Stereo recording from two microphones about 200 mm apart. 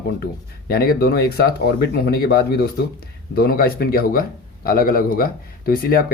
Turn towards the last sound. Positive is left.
turn(degrees=45)  # may be behind; listen again after turning